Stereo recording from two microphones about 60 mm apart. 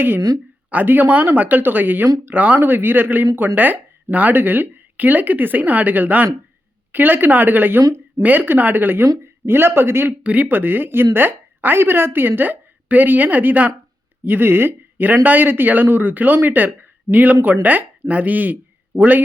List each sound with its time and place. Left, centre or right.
0.7 s speech: right
2.6 s speech: right
10.2 s a woman's voice: right